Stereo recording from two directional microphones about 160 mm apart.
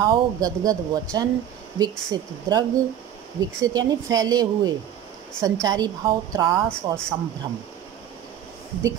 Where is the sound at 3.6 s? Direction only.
25° right (ahead or behind).